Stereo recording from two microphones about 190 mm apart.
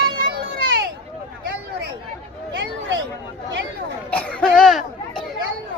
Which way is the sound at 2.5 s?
70° right (ahead or behind).